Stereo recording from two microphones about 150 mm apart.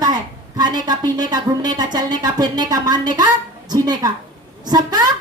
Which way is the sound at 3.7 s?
25° right (ahead or behind).